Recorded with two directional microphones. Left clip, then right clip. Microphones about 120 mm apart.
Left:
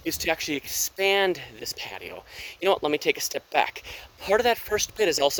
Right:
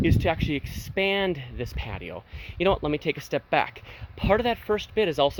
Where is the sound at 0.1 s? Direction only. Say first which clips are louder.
Even; 30° left (ahead or behind).